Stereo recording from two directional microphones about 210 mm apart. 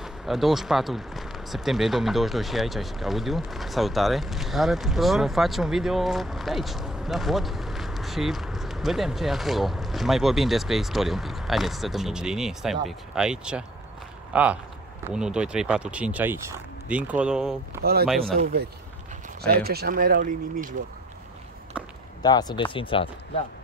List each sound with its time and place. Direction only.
0.0 s speech: centre (ahead or behind)
19.4 s speech: 50° right (ahead or behind)
22.2 s speech: 20° left (ahead or behind)